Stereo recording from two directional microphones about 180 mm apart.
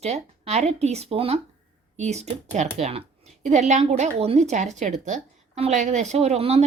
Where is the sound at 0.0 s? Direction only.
35° right (ahead or behind).